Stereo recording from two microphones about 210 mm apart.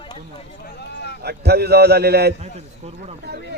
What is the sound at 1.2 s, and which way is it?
A man's voice, 50° right (ahead or behind).